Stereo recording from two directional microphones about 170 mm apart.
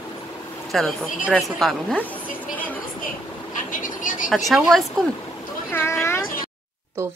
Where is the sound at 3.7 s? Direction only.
50° left (ahead or behind).